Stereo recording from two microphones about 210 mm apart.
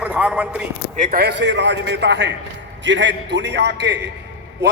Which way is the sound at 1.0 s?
45° right (ahead or behind).